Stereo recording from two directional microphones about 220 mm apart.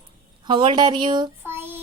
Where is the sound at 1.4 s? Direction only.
10° right (ahead or behind).